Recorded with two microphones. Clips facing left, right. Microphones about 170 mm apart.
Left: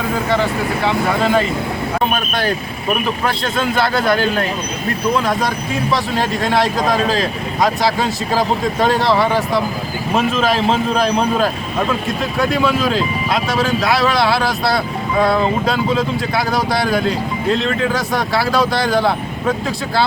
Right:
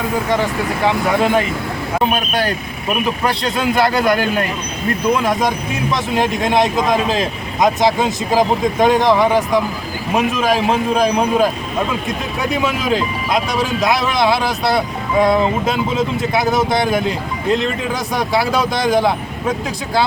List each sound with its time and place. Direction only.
0.9 s speech: 15° right (ahead or behind)
3.2 s speech: 10° right (ahead or behind)